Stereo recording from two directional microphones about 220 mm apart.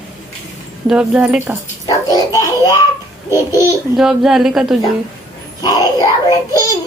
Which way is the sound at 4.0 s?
Centre (ahead or behind).